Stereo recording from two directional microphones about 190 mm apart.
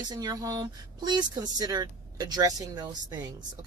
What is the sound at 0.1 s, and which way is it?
Speech, 20° right (ahead or behind).